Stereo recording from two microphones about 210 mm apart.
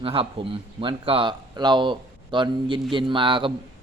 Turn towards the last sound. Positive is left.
turn(degrees=-25)  # may be behind; listen again after turning